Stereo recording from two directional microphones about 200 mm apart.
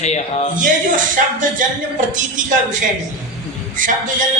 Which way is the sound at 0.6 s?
40° right (ahead or behind).